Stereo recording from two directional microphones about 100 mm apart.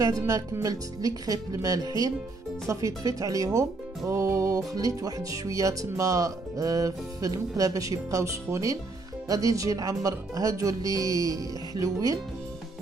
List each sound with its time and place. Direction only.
0.0 s speech: 35° right (ahead or behind)